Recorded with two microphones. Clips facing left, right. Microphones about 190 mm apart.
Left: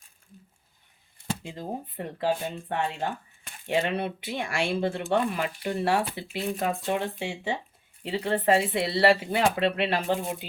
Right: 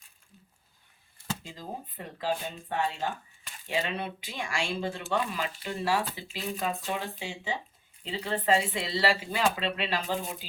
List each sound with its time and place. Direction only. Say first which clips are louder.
1.5 s speech: left 5 dB; 60° left (ahead or behind)